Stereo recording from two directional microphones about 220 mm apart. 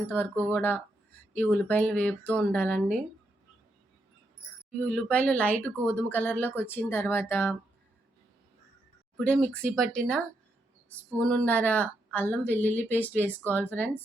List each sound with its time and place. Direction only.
0.0 s speech: 10° left (ahead or behind)
4.8 s speech: 5° left (ahead or behind)
9.1 s speech: 5° left (ahead or behind)